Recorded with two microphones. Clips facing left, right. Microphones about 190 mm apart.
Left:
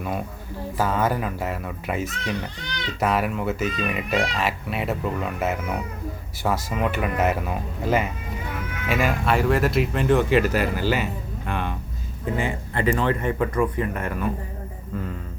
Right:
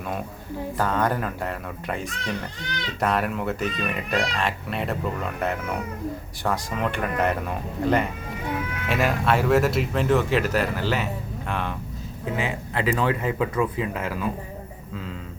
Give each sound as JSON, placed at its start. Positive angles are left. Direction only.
{"t": 0.8, "sound": "speech", "side_deg": 5}
{"t": 12.7, "sound": "speech", "side_deg": -90}
{"t": 13.1, "sound": "speech", "side_deg": -10}
{"t": 13.7, "sound": "speech", "side_deg": -90}